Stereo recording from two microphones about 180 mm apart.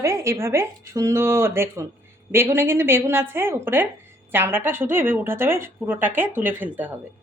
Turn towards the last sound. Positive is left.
turn(degrees=-10)  # may be behind; listen again after turning